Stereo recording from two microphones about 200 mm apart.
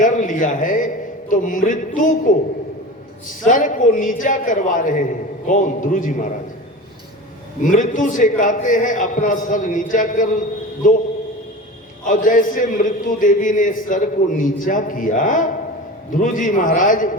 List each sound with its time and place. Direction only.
0.0 s a sound: 40° left (ahead or behind)
1.3 s a man's voice: 40° left (ahead or behind)
3.4 s a man's voice: 40° left (ahead or behind)
7.6 s a man's voice: 40° left (ahead or behind)
12.0 s a man's voice: 40° left (ahead or behind)